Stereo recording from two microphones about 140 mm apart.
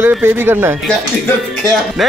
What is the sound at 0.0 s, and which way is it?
Speech, 15° right (ahead or behind).